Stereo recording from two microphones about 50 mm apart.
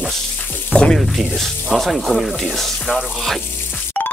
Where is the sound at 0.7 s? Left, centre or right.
Right.